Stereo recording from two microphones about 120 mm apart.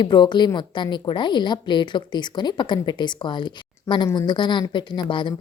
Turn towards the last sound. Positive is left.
turn(degrees=40)  # may be behind; listen again after turning